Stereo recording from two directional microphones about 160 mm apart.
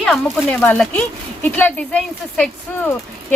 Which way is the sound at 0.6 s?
10° left (ahead or behind).